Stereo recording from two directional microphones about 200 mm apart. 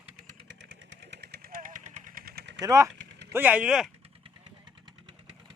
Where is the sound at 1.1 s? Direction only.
55° right (ahead or behind).